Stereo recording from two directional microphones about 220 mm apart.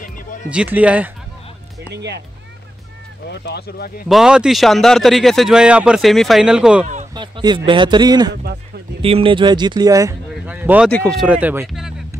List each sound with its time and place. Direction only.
0.0 s music: 35° left (ahead or behind)
0.5 s speech: 5° right (ahead or behind)
2.0 s speech: 50° right (ahead or behind)
3.3 s speech: 45° left (ahead or behind)
4.1 s a man's voice: 5° right (ahead or behind)
7.2 s speech: 20° right (ahead or behind)
10.3 s a sound: 5° right (ahead or behind)
10.9 s a man's voice: 5° left (ahead or behind)